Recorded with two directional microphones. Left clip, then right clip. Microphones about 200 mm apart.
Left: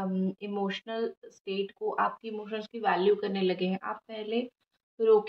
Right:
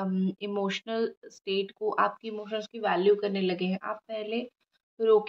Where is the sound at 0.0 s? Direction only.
45° right (ahead or behind).